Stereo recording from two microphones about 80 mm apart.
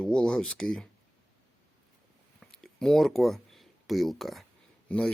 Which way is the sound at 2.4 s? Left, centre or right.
Centre.